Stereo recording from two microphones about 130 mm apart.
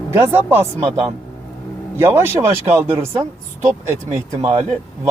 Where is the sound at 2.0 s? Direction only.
15° right (ahead or behind).